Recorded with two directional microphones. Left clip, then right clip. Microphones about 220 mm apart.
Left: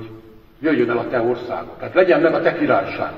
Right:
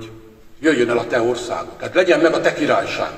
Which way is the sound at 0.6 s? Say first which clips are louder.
Right 2 dB; 45° right (ahead or behind).